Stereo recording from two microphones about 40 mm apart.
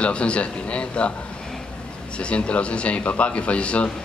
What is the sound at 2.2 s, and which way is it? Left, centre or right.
A man's voice, left.